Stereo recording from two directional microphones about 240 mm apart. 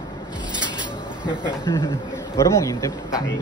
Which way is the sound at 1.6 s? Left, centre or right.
Centre.